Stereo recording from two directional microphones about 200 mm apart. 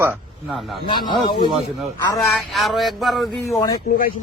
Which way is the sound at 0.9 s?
25° left (ahead or behind).